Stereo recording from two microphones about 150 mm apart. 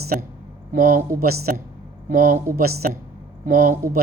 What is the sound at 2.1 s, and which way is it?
Speech, 65° right (ahead or behind).